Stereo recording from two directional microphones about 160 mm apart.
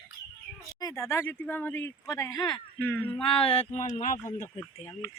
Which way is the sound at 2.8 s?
10° left (ahead or behind).